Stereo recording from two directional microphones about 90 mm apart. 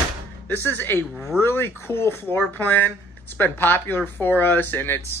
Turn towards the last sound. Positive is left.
turn(degrees=25)  # may be behind; listen again after turning